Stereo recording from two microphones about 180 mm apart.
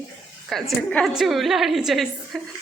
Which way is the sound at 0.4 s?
5° left (ahead or behind).